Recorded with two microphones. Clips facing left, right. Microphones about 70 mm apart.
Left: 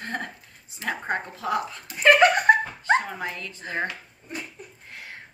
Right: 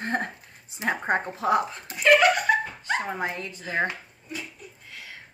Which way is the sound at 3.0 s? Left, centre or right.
Right.